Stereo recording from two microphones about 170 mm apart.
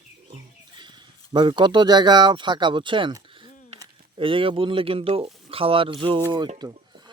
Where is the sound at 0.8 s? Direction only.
25° right (ahead or behind).